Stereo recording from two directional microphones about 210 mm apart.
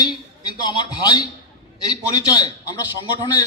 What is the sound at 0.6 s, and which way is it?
A man's voice, 20° left (ahead or behind).